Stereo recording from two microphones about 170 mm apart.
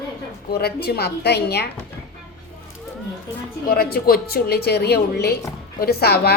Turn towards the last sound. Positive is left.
turn(degrees=70)  # may be behind; listen again after turning